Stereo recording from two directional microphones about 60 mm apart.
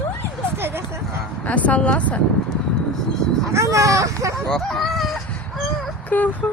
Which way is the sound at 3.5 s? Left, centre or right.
Right.